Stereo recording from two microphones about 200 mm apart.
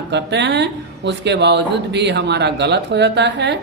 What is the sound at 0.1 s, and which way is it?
Speech, 60° right (ahead or behind).